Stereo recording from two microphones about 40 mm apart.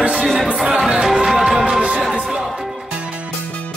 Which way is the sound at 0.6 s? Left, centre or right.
Centre.